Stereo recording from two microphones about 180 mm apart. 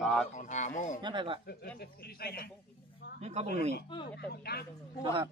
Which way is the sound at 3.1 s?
35° right (ahead or behind).